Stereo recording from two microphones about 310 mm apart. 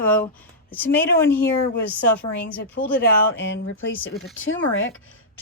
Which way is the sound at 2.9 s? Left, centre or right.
Left.